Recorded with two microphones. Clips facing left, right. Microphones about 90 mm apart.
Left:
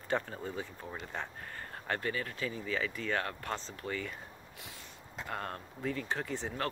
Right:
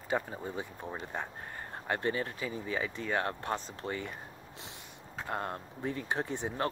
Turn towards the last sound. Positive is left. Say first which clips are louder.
# right 3 dB
turn(degrees=-20)  # may be behind; listen again after turning